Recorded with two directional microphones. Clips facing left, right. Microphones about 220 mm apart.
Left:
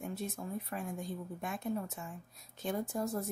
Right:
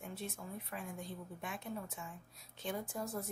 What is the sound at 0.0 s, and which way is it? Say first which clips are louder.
Speech: left 6 dB; 45° left (ahead or behind).